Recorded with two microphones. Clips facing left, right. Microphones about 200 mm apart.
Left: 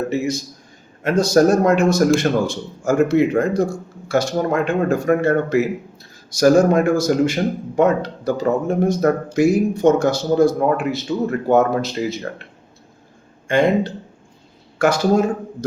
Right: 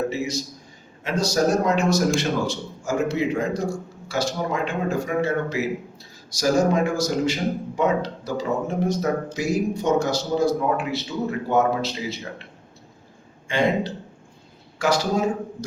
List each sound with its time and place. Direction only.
1.0 s speech: 55° left (ahead or behind)
13.5 s speech: 50° left (ahead or behind)
14.8 s speech: 55° left (ahead or behind)